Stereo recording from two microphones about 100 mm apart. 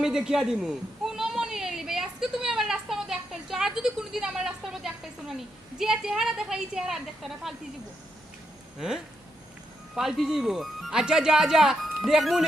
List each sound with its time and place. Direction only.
0.0 s a sound: 5° right (ahead or behind)
5.8 s speech: 5° right (ahead or behind)
9.9 s speech: 5° right (ahead or behind)